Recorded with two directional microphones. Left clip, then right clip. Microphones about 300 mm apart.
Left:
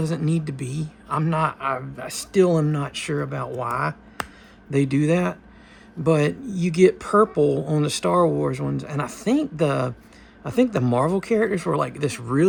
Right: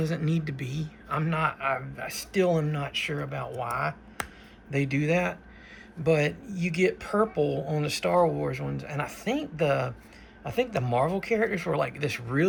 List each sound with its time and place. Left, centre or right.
0.0 s speech: centre